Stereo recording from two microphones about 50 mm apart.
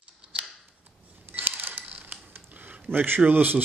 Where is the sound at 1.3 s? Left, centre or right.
Right.